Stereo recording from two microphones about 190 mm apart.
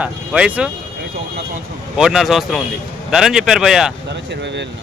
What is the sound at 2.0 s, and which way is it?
Speech, 5° right (ahead or behind).